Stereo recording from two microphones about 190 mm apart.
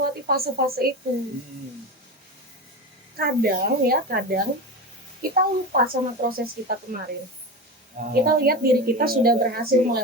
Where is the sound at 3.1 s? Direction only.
50° right (ahead or behind).